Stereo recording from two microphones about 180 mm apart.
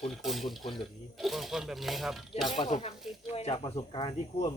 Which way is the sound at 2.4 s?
30° left (ahead or behind).